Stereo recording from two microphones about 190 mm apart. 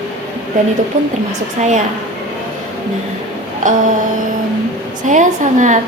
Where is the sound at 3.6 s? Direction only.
40° right (ahead or behind).